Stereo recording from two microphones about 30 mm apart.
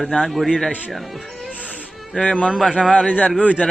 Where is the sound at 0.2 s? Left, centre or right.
Centre.